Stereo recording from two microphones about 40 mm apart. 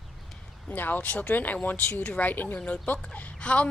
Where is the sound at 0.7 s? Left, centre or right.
Left.